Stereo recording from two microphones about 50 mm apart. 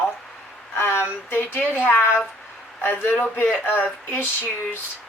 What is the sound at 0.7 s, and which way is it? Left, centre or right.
Speech, left.